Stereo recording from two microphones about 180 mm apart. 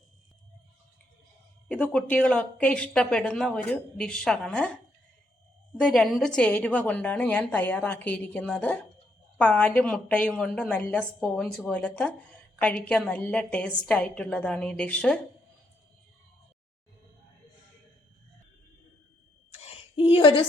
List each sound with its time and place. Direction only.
1.6 s speech: 5° left (ahead or behind)
5.8 s a woman's voice: centre (ahead or behind)
19.6 s a sound: 30° left (ahead or behind)